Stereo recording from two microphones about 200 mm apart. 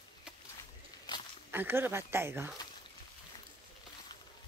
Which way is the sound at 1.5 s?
10° right (ahead or behind).